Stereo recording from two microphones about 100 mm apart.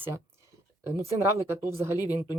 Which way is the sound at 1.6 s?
25° right (ahead or behind).